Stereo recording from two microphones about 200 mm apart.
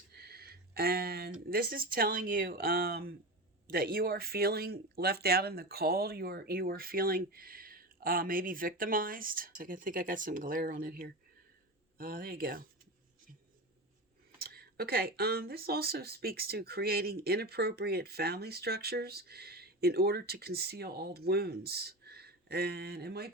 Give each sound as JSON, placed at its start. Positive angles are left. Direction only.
{"t": 0.1, "sound": "a sound", "side_deg": -50}
{"t": 1.5, "sound": "speech", "side_deg": -45}
{"t": 14.4, "sound": "speech", "side_deg": -50}